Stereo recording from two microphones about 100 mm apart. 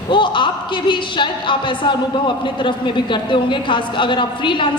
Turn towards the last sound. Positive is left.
turn(degrees=55)  # may be behind; listen again after turning